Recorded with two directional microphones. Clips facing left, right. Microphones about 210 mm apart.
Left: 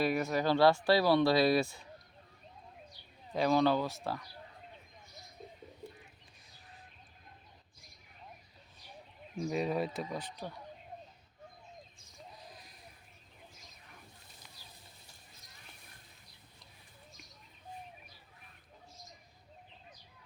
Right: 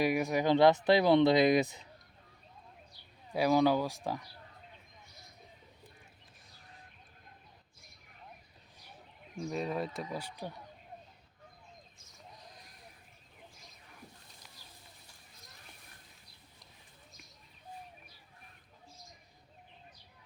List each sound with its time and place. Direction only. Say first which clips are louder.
0.0 s speech: right 1 dB; 15° right (ahead or behind)
3.3 s speech: right 1 dB; 10° right (ahead or behind)
9.4 s speech: left 2 dB; 5° left (ahead or behind); by 10.5 s 10° right (ahead or behind)
12.6 s a sound: even; centre (ahead or behind)